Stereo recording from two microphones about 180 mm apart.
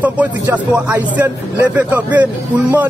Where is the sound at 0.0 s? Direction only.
10° right (ahead or behind).